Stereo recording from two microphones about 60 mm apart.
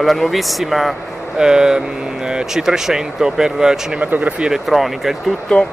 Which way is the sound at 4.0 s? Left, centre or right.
Right.